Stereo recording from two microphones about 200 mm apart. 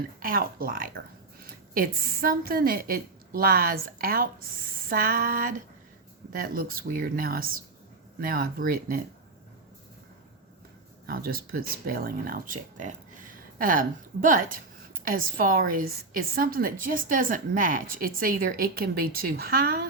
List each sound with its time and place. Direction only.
0.2 s a woman's voice: 45° right (ahead or behind)
11.0 s a woman's voice: 50° right (ahead or behind)